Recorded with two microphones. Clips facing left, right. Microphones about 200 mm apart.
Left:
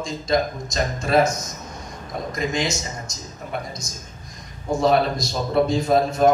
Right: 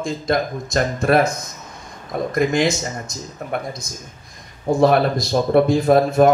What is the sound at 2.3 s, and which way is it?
Speech, 55° right (ahead or behind).